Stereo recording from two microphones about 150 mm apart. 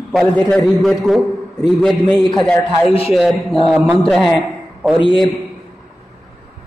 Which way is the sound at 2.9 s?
40° left (ahead or behind).